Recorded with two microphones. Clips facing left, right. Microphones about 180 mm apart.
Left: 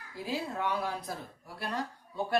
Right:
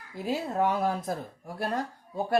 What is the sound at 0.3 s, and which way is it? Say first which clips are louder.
Speech: right 6 dB; 45° right (ahead or behind).